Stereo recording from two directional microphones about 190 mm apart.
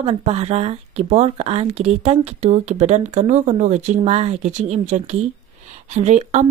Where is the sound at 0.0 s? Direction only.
35° right (ahead or behind).